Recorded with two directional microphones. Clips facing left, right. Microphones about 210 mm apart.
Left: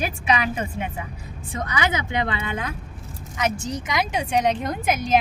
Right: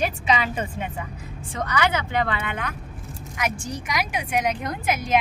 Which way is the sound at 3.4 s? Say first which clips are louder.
Left 3 dB; 25° left (ahead or behind).